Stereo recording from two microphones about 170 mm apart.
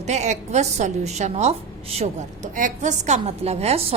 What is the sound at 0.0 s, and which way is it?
A woman's voice, 40° right (ahead or behind).